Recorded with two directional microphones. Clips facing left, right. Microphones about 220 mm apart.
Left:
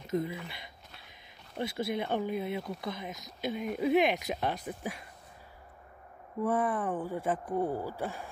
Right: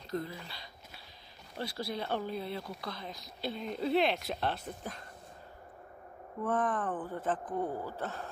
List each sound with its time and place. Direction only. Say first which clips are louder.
0.0 s speech: left 5 dB; 20° left (ahead or behind)
6.4 s speech: left 2 dB; 10° left (ahead or behind)